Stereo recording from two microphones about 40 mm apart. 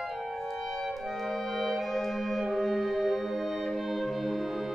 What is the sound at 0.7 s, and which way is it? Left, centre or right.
Music, centre.